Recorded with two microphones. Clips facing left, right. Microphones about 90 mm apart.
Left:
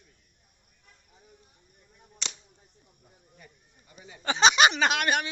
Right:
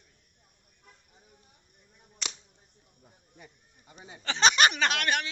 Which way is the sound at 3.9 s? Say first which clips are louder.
Right 1 dB; 30° right (ahead or behind).